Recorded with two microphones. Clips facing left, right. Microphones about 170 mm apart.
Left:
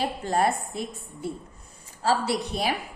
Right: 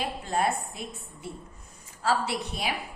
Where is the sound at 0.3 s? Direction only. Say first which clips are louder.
Left 3 dB; 40° left (ahead or behind).